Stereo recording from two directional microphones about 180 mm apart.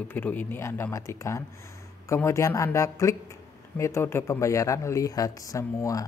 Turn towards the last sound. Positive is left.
turn(degrees=15)  # may be behind; listen again after turning